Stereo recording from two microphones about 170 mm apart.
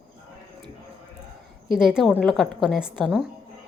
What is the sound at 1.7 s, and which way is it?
A woman's voice, 5° right (ahead or behind).